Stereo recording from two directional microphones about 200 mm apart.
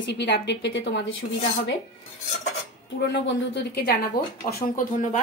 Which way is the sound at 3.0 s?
65° left (ahead or behind).